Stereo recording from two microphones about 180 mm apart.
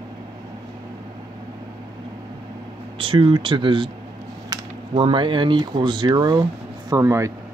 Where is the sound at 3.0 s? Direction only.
30° right (ahead or behind).